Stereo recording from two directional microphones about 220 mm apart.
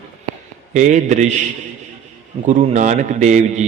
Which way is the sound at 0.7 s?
35° right (ahead or behind).